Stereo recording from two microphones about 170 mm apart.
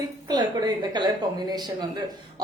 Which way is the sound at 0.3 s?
25° right (ahead or behind).